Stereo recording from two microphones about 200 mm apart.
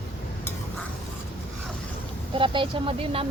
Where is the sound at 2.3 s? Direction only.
25° right (ahead or behind).